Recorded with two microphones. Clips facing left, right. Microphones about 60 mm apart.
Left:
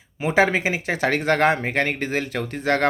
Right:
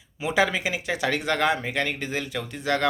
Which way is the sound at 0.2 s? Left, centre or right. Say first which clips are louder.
Left 4 dB; left.